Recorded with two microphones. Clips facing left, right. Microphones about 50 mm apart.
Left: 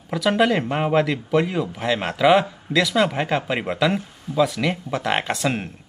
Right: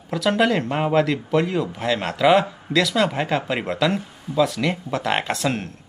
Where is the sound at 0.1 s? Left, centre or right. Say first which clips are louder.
Even; centre.